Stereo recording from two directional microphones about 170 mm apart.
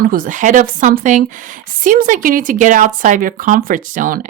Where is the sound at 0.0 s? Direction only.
55° right (ahead or behind).